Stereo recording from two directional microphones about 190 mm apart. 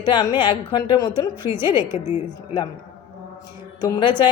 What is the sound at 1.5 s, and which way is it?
Speech, 10° right (ahead or behind).